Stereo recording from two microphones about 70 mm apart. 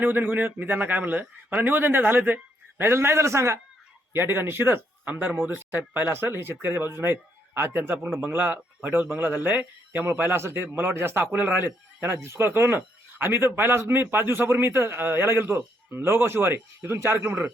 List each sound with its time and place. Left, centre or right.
0.0 s a man's voice: right
4.1 s a man's voice: right